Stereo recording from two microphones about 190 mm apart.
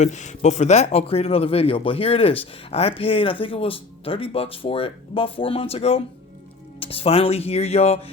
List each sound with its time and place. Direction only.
0.0 s a man's voice: 40° left (ahead or behind)